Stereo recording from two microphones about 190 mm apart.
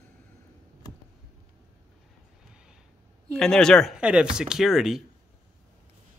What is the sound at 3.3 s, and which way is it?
Speech, 5° left (ahead or behind).